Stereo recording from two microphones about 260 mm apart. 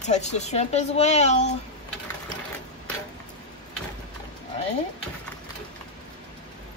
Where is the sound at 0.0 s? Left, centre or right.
Left.